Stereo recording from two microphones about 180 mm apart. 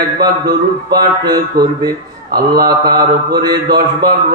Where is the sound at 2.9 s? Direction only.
20° right (ahead or behind).